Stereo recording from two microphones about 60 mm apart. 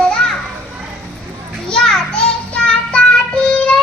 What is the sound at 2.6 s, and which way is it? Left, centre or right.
Child singing, centre.